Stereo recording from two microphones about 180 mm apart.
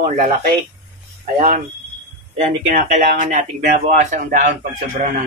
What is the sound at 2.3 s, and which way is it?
Speech, 45° right (ahead or behind).